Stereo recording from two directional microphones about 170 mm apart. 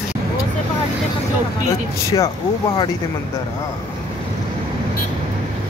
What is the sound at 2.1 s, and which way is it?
Speech, 25° left (ahead or behind).